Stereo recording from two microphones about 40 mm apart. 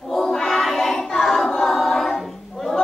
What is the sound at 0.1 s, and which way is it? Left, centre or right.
Music, centre.